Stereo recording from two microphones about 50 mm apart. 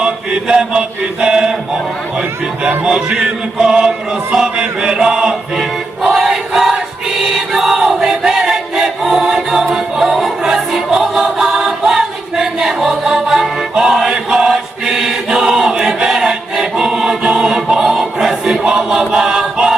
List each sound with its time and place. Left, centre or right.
0.0 s chant: centre
2.6 s music: centre
3.6 s chant: centre
5.5 s music: centre
7.2 s choir: centre
9.7 s music: centre
11.1 s choir: centre